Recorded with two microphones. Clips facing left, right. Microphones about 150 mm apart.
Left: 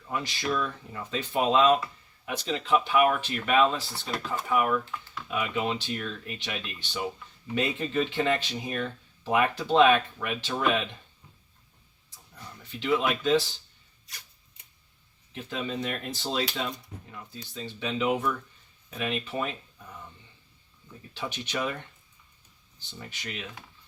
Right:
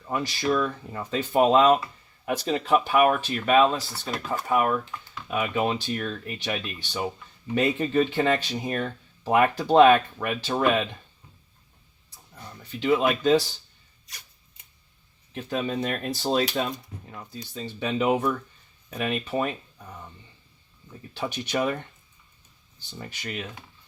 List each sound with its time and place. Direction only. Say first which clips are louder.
0.1 s speech: right 5 dB; 45° right (ahead or behind)
12.8 s speech: right 4 dB; 40° right (ahead or behind)
15.4 s speech: right 5 dB; 50° right (ahead or behind)
21.1 s speech: right 5 dB; 45° right (ahead or behind)
23.0 s speech: right 4 dB; 45° right (ahead or behind)